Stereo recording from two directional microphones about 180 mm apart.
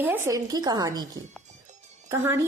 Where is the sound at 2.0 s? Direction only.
15° right (ahead or behind).